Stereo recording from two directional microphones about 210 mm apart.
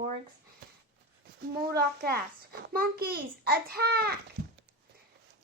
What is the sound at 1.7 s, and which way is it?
A child's voice, 45° right (ahead or behind).